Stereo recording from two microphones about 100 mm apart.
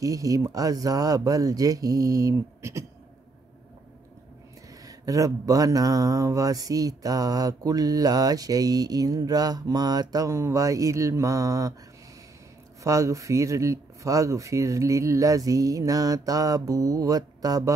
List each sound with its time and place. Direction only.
0.0 s speech: 35° right (ahead or behind)
4.8 s speech: 35° right (ahead or behind)
12.8 s speech: 30° right (ahead or behind)